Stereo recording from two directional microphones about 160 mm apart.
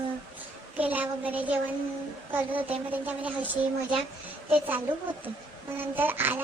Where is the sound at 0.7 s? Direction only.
10° right (ahead or behind).